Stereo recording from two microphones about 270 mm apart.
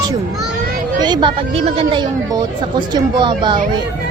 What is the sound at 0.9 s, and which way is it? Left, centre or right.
Speech, centre.